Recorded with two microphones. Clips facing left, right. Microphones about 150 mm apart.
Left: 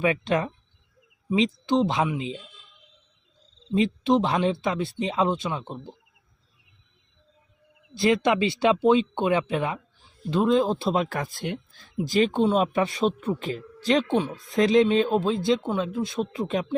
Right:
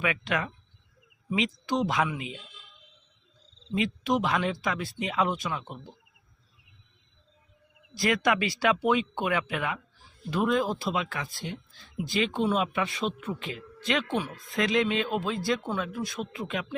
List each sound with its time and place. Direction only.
0.0 s speech: 35° left (ahead or behind)
3.8 s speech: 25° left (ahead or behind)
7.9 s speech: 25° left (ahead or behind); by 11.6 s 55° left (ahead or behind)
11.9 s speech: 40° left (ahead or behind); by 16.1 s 25° left (ahead or behind)
16.2 s speech: 35° left (ahead or behind)